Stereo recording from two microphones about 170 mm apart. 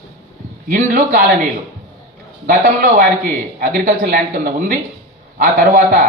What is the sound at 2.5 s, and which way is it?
A man's voice, 55° right (ahead or behind).